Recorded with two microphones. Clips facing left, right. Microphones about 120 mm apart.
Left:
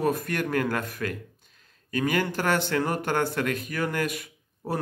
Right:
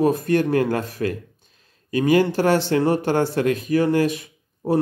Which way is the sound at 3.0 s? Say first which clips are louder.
Right 6 dB; 55° left (ahead or behind).